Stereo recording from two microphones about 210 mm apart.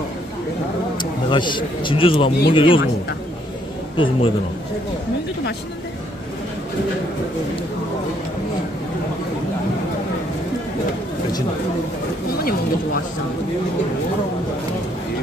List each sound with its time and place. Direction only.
0.9 s speech: 20° left (ahead or behind)
3.9 s a man's voice: 25° left (ahead or behind)